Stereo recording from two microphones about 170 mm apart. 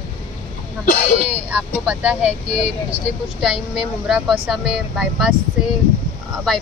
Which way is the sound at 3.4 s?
5° right (ahead or behind).